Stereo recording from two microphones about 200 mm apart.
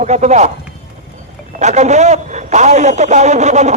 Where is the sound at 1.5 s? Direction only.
35° right (ahead or behind).